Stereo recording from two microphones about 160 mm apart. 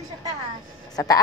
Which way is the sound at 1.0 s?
20° left (ahead or behind).